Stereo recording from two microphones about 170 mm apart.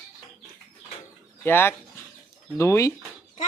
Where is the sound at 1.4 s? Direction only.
15° left (ahead or behind).